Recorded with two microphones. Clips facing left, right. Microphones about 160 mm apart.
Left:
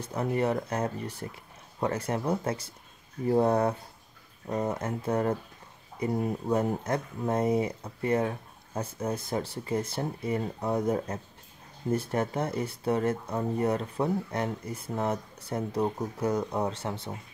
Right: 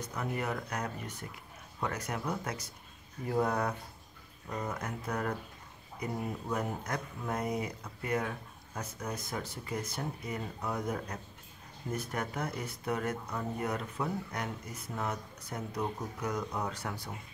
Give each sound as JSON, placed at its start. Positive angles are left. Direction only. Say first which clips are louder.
{"t": 0.0, "sound": "speech", "louder": "left 8 dB", "side_deg": 30}
{"t": 6.5, "sound": "speech", "louder": "left 8 dB", "side_deg": 30}